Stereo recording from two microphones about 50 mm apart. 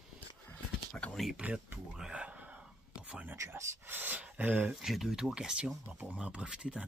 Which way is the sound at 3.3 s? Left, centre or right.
Right.